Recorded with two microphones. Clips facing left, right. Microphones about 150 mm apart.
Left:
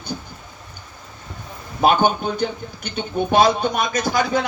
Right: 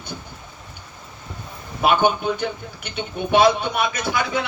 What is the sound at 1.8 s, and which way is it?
Speech, 40° left (ahead or behind).